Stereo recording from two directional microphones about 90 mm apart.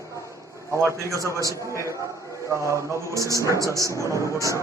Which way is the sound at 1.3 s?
35° right (ahead or behind).